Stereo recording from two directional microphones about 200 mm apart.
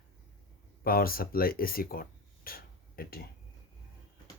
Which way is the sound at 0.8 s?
45° left (ahead or behind).